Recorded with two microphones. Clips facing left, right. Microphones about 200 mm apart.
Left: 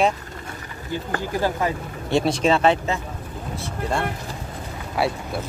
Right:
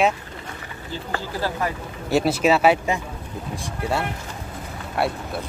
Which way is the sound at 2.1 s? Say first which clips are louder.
Right 1 dB; 5° right (ahead or behind).